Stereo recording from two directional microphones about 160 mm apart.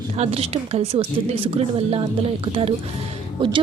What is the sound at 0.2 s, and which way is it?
A woman's voice, 40° right (ahead or behind).